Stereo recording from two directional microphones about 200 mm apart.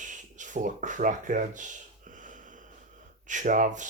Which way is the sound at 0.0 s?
40° right (ahead or behind).